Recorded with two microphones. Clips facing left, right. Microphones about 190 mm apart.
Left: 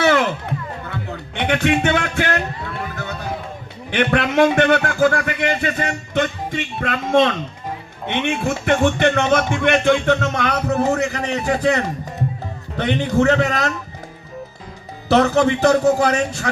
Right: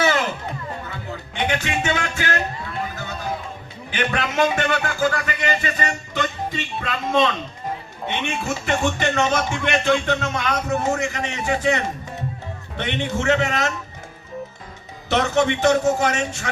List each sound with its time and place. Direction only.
0.0 s music: 60° left (ahead or behind)
1.4 s a man's voice: 60° left (ahead or behind)
2.7 s music: 60° left (ahead or behind)
3.9 s a man's voice: 60° left (ahead or behind)
8.6 s a man's voice: 55° left (ahead or behind)
10.7 s a man's voice: 35° left (ahead or behind)
15.1 s a man's voice: 35° left (ahead or behind)